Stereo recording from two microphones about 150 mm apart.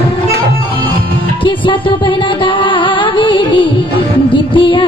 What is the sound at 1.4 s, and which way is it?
Music, 35° left (ahead or behind).